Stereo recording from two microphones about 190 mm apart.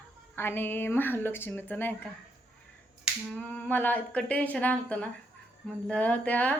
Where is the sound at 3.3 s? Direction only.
5° left (ahead or behind).